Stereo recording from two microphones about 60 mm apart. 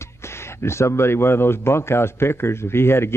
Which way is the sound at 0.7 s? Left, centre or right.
Left.